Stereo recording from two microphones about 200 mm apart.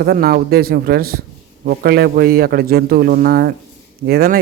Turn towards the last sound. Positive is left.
turn(degrees=-50)  # may be behind; listen again after turning